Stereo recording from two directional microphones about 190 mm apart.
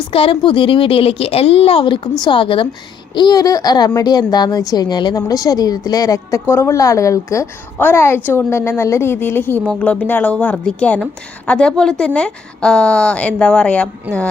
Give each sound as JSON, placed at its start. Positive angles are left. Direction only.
{"t": 0.1, "sound": "a woman's voice", "side_deg": 30}